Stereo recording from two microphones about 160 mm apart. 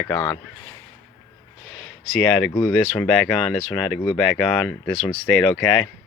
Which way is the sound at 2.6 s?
5° left (ahead or behind).